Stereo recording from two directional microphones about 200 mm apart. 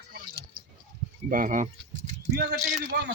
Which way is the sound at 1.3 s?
40° right (ahead or behind).